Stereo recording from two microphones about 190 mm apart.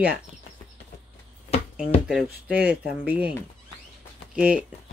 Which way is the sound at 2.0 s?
5° right (ahead or behind).